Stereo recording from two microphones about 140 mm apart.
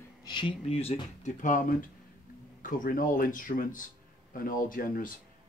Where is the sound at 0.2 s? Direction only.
35° left (ahead or behind).